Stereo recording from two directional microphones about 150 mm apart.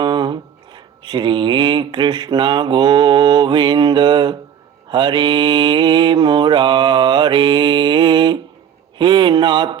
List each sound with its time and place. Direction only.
0.0 s speech: 30° right (ahead or behind)
4.9 s mantra: 30° right (ahead or behind)
9.0 s speech: 30° right (ahead or behind)